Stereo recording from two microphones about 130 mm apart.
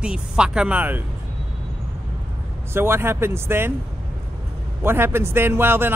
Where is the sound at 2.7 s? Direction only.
20° right (ahead or behind).